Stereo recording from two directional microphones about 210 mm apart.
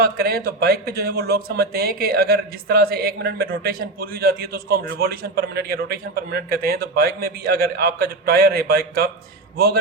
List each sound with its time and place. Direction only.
0.0 s a man's voice: 50° right (ahead or behind)